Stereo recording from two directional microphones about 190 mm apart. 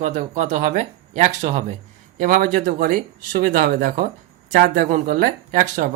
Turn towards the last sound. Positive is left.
turn(degrees=-45)  # may be behind; listen again after turning